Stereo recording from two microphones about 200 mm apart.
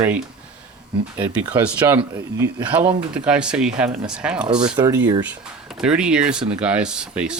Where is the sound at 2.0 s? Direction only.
20° right (ahead or behind).